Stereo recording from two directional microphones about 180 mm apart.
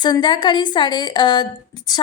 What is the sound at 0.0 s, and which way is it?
A woman's voice, 25° left (ahead or behind).